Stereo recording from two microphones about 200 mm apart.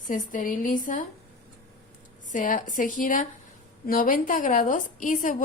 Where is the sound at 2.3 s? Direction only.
40° left (ahead or behind).